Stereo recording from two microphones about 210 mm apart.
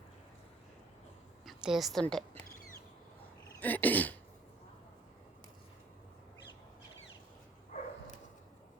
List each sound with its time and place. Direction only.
1.5 s a woman's voice: centre (ahead or behind)
3.6 s cough: 10° left (ahead or behind)
7.7 s bow-wow: 40° left (ahead or behind)